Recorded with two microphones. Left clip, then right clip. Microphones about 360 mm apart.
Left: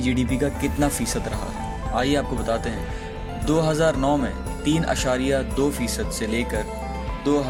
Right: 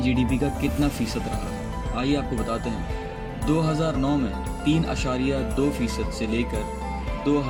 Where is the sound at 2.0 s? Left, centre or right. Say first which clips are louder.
Left 3 dB; left.